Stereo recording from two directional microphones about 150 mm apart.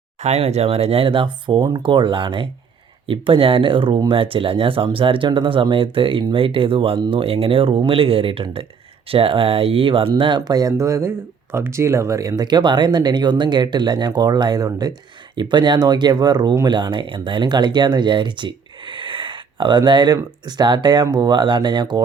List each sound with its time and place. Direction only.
0.2 s speech: 45° right (ahead or behind); by 22.0 s 30° right (ahead or behind)